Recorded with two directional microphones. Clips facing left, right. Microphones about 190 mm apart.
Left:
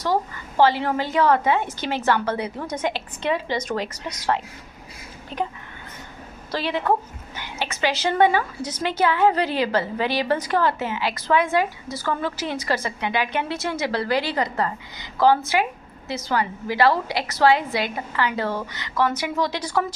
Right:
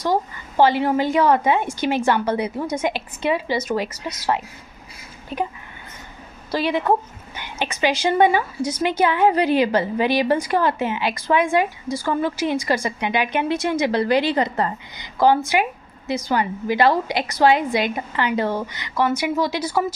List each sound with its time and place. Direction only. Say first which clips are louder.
0.0 s a woman's voice: right 2 dB; 15° right (ahead or behind)
6.5 s a woman's voice: right 3 dB; 15° right (ahead or behind)